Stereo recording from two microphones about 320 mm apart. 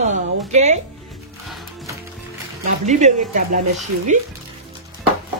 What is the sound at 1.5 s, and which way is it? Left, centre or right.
Music, centre.